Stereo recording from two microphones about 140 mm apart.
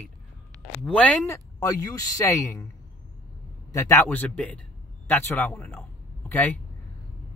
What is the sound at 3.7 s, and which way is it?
Speech, 15° left (ahead or behind).